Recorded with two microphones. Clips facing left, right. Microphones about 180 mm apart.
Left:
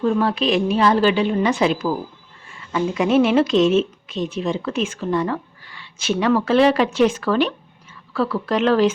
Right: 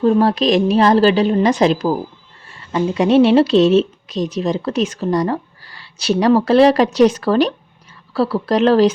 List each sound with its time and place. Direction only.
0.0 s speech: 35° right (ahead or behind)